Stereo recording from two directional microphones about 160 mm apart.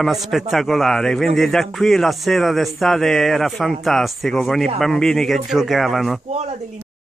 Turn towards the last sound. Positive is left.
turn(degrees=-45)  # may be behind; listen again after turning